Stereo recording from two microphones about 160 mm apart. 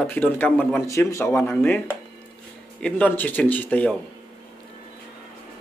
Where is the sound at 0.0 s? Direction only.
10° left (ahead or behind).